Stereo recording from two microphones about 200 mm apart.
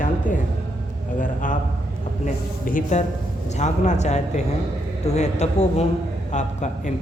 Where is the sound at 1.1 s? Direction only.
40° left (ahead or behind).